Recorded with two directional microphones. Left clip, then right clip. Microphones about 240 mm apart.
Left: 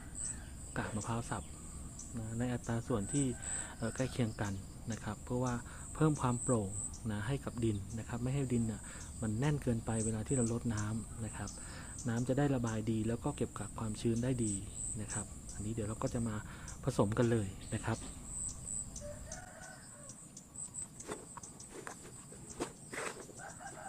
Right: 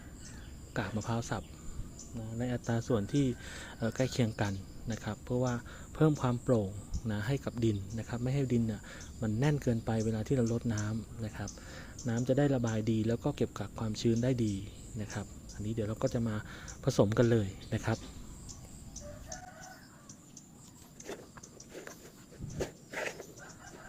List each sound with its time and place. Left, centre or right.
0.7 s speech: centre